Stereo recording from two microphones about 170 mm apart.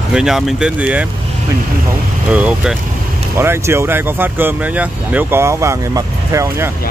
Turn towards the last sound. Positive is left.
turn(degrees=-15)  # may be behind; listen again after turning